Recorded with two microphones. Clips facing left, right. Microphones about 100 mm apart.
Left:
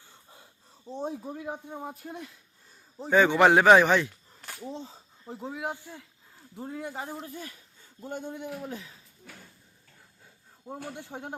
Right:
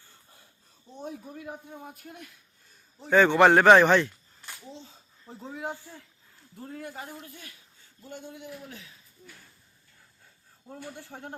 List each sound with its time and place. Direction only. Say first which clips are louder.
0.9 s a man's voice: left 5 dB; 30° left (ahead or behind)
3.1 s a man's voice: right 1 dB; 10° left (ahead or behind)
4.4 s a sound: left 6 dB; 45° left (ahead or behind)
5.2 s a man's voice: left 2 dB; 15° left (ahead or behind); by 7.5 s 40° left (ahead or behind)
8.0 s a man's voice: left 6 dB; 50° left (ahead or behind)
8.6 s speech: left 7 dB; 40° left (ahead or behind)
10.9 s speech: left 3 dB; 20° left (ahead or behind)